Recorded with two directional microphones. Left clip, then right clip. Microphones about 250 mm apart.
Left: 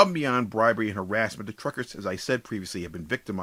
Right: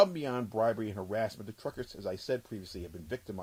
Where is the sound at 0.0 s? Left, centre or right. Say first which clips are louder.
Left 6 dB; centre.